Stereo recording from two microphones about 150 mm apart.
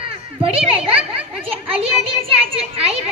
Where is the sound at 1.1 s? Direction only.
40° right (ahead or behind).